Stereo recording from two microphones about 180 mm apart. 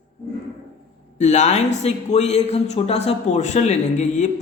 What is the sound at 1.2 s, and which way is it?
A man's voice, 40° left (ahead or behind).